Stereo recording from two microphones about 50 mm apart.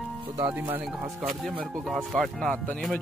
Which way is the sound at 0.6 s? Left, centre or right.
Right.